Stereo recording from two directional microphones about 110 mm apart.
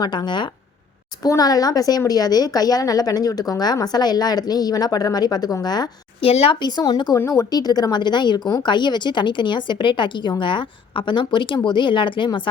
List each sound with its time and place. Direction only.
0.0 s speech: 40° left (ahead or behind)
6.1 s speech: 65° left (ahead or behind)
6.6 s speech: 40° left (ahead or behind)
7.2 s a woman's voice: 30° left (ahead or behind); by 12.4 s 45° left (ahead or behind)